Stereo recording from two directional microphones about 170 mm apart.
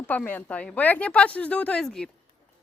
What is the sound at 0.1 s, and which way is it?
A woman's voice, 10° left (ahead or behind).